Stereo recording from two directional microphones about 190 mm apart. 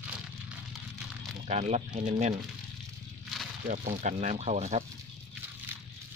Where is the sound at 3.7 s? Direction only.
40° right (ahead or behind).